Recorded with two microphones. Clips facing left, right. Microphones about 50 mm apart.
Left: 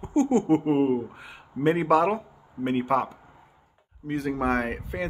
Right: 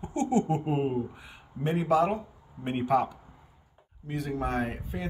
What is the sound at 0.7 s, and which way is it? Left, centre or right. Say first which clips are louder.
Speech: left 6 dB; left.